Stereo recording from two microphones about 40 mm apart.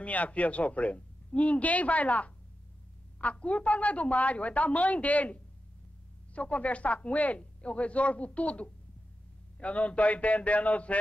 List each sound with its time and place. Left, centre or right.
0.0 s speech: left